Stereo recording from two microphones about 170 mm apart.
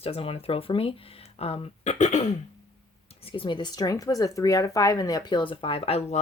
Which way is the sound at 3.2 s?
30° left (ahead or behind).